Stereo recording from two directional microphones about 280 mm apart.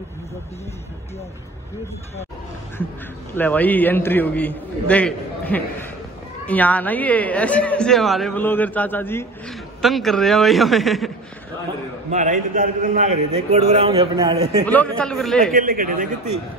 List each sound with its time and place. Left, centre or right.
3.3 s a man's voice: centre
12.1 s a man's voice: right
14.7 s a man's voice: centre
15.5 s speech: right